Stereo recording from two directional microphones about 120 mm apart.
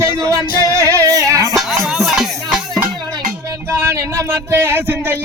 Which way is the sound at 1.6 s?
Centre (ahead or behind).